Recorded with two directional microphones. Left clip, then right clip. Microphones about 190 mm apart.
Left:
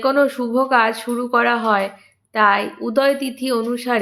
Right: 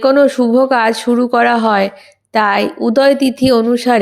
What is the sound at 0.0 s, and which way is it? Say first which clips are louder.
Speech: right 7 dB; 30° right (ahead or behind).